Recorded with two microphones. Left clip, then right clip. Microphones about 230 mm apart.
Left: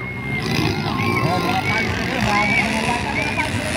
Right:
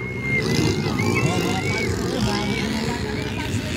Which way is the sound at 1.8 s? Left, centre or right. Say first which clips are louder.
Left 3 dB; centre.